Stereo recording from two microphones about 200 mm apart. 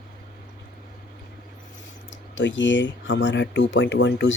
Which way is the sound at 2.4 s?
70° left (ahead or behind).